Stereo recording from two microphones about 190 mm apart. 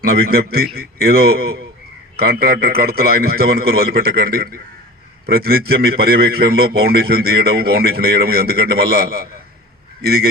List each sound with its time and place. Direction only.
0.0 s a man's voice: 55° right (ahead or behind)